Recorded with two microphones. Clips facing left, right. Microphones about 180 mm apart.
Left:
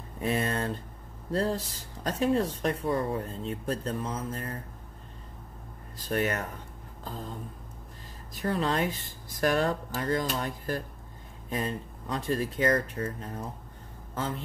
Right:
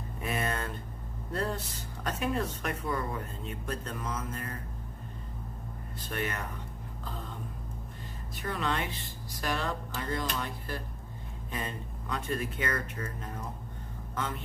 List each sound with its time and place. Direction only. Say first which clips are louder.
0.2 s speech: left 5 dB; 30° left (ahead or behind)
5.9 s speech: left 7 dB; 40° left (ahead or behind)
8.4 s speech: left 5 dB; 35° left (ahead or behind)
11.5 s a man's voice: left 6 dB; 35° left (ahead or behind)